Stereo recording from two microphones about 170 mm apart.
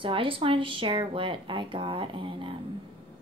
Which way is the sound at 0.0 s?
30° right (ahead or behind).